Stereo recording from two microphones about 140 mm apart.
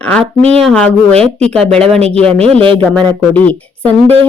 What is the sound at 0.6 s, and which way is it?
Speech, 5° left (ahead or behind).